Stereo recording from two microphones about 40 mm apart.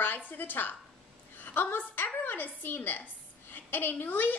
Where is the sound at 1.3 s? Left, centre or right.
Left.